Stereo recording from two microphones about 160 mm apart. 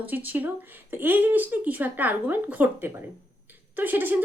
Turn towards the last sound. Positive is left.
turn(degrees=-10)  # may be behind; listen again after turning